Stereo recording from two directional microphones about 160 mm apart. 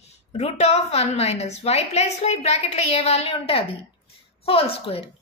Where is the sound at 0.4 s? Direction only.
40° left (ahead or behind).